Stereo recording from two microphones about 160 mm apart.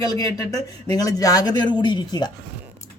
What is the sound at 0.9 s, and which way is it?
Speech, 20° left (ahead or behind).